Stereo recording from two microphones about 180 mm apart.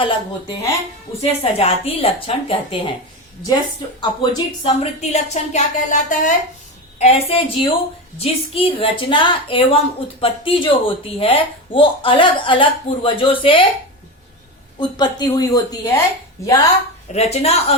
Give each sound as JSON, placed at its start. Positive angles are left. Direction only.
{"t": 0.0, "sound": "a woman's voice", "side_deg": 25}
{"t": 4.0, "sound": "a woman's voice", "side_deg": 25}
{"t": 14.8, "sound": "speech", "side_deg": 25}
{"t": 17.1, "sound": "a woman's voice", "side_deg": 35}